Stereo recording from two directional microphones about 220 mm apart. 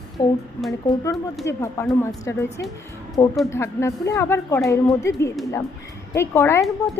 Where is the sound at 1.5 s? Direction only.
10° left (ahead or behind).